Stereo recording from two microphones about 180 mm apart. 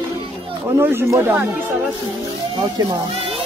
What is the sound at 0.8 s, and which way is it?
Speech, 15° right (ahead or behind).